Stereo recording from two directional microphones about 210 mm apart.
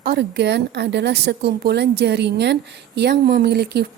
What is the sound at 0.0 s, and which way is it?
Speech, 50° right (ahead or behind).